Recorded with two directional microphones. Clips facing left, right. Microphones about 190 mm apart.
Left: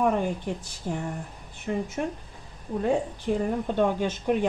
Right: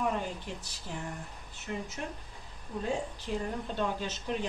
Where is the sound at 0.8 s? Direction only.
50° left (ahead or behind).